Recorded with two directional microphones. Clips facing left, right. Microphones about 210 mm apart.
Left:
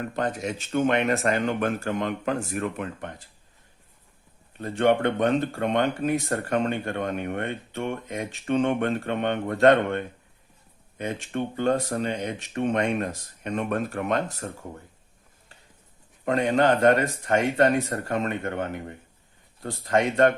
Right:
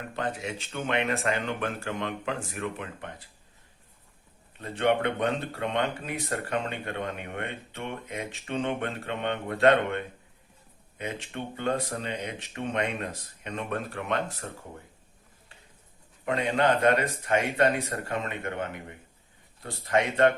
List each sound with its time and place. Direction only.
0.2 s speech: 40° left (ahead or behind)
4.6 s speech: 45° left (ahead or behind)
11.0 s speech: 45° left (ahead or behind)
16.2 s speech: 45° left (ahead or behind)